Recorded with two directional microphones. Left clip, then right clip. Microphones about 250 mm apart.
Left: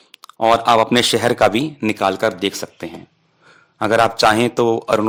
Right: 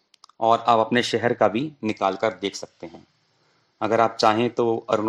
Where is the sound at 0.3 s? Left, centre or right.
Left.